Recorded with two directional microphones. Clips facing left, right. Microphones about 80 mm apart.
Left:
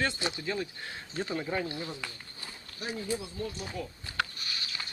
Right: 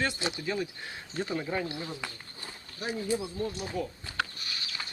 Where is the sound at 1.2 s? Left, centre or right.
Centre.